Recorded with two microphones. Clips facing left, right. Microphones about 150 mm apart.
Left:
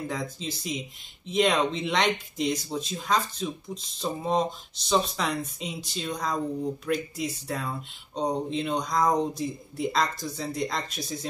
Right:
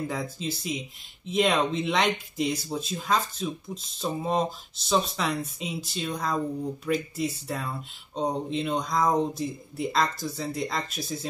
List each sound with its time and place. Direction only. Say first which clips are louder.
0.1 s speech: right 1 dB; 5° right (ahead or behind)